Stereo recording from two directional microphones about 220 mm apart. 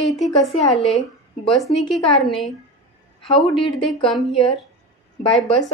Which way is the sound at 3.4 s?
Centre (ahead or behind).